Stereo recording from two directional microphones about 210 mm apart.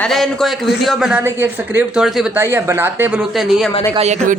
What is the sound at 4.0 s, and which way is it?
Speech, 35° right (ahead or behind).